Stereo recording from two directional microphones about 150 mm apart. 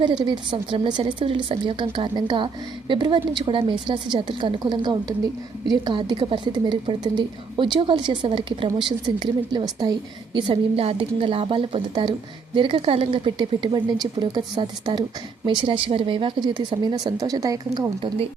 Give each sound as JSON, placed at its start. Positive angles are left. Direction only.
{"t": 0.3, "sound": "a woman's voice", "side_deg": -30}